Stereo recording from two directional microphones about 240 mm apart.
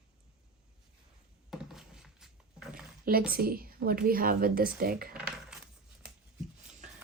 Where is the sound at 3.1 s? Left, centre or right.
Right.